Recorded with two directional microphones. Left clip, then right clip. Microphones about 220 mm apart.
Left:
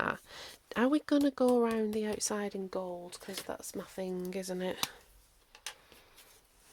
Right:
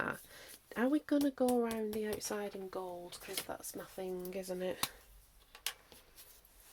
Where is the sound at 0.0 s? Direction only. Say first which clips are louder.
Left 5 dB; 30° left (ahead or behind); by 1.9 s 45° left (ahead or behind).